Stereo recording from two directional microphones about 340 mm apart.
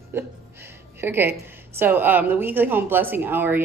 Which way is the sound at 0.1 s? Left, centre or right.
Centre.